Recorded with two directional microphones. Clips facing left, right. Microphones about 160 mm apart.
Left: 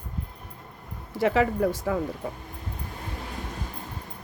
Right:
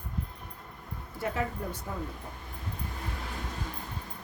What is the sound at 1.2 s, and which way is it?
A woman's voice, 90° left.